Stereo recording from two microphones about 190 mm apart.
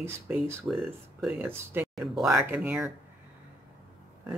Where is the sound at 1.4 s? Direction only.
10° right (ahead or behind).